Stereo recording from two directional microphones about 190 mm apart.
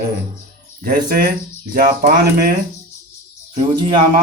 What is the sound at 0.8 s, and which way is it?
Speech, 50° right (ahead or behind).